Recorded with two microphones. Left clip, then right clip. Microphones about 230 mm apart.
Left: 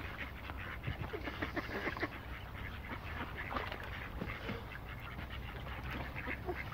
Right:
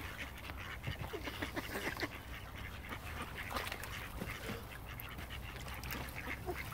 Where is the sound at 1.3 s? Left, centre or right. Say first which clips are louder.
Left 2 dB; right.